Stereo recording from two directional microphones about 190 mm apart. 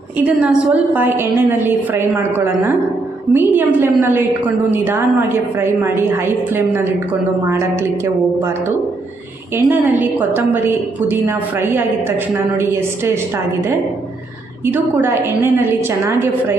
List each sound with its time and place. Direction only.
0.2 s a woman's voice: 5° right (ahead or behind)
14.6 s a woman's voice: 10° right (ahead or behind)